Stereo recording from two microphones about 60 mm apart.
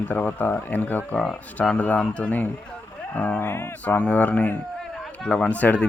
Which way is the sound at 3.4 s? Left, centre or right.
Left.